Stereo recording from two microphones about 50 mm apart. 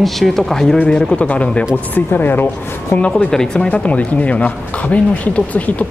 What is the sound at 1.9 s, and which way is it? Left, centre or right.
Speech, left.